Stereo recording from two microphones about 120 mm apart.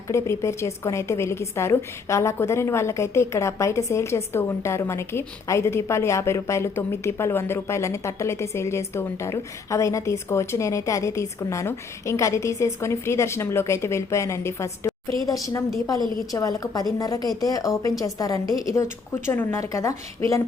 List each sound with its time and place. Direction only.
0.1 s a woman's voice: 25° left (ahead or behind)
16.3 s a woman's voice: 30° left (ahead or behind)